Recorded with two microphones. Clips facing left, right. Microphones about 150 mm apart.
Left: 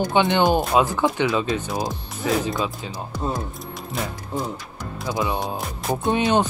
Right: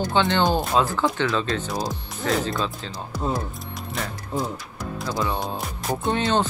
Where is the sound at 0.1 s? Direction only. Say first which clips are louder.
Left 2 dB; 15° left (ahead or behind).